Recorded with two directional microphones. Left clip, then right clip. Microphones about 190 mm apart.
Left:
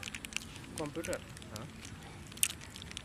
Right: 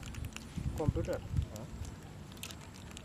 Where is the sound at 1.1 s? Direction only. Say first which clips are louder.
Right 1 dB; 5° right (ahead or behind).